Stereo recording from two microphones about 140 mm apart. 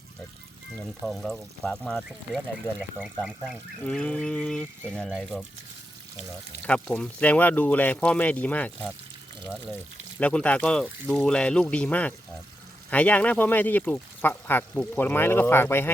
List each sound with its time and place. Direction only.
0.8 s speech: centre (ahead or behind)
3.8 s speech: 10° left (ahead or behind)
6.6 s speech: 10° left (ahead or behind)